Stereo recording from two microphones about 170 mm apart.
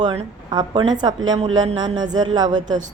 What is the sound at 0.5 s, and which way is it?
A woman's voice, 25° right (ahead or behind).